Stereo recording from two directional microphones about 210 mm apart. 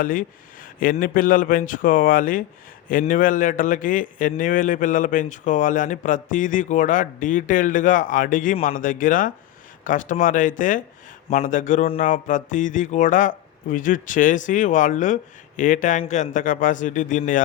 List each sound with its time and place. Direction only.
0.0 s speech: 40° left (ahead or behind)